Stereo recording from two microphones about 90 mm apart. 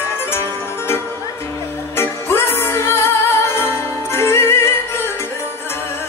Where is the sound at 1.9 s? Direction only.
25° left (ahead or behind).